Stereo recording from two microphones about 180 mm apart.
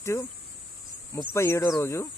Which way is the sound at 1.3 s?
15° left (ahead or behind).